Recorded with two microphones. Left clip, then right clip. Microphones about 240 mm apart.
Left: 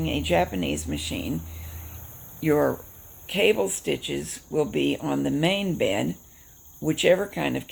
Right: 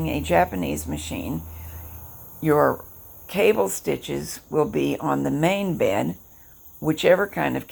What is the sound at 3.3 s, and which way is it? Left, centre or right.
Speech, centre.